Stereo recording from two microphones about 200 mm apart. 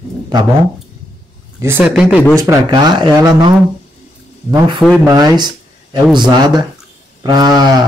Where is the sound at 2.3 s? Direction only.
15° right (ahead or behind).